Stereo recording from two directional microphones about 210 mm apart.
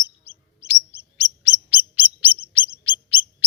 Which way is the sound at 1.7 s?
10° right (ahead or behind).